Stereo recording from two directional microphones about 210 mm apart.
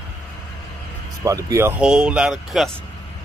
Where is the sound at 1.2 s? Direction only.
15° right (ahead or behind).